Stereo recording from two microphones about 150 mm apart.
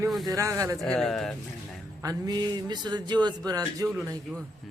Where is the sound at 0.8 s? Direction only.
5° left (ahead or behind).